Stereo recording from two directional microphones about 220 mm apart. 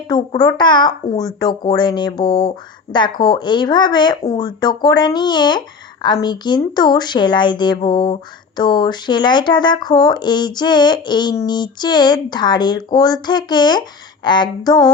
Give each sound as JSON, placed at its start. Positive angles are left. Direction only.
{"t": 0.1, "sound": "speech", "side_deg": 20}